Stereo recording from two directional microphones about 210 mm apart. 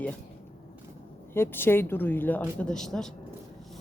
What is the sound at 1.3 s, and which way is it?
Speech, 10° left (ahead or behind).